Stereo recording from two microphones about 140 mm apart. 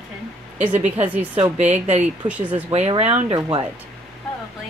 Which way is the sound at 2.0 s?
10° right (ahead or behind).